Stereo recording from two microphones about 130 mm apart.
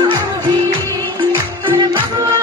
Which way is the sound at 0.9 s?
35° right (ahead or behind).